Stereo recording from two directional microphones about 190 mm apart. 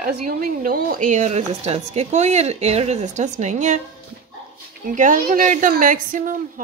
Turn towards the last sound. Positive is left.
turn(degrees=-45)  # may be behind; listen again after turning